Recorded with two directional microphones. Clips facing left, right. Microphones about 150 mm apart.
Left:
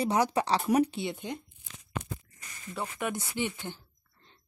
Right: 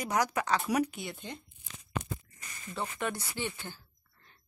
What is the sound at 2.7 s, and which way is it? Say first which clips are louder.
Speech: left 1 dB; 10° left (ahead or behind).